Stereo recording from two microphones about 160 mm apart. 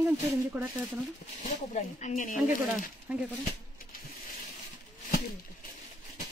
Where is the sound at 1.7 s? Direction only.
50° left (ahead or behind).